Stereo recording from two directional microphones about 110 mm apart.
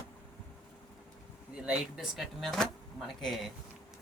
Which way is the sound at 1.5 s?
5° right (ahead or behind).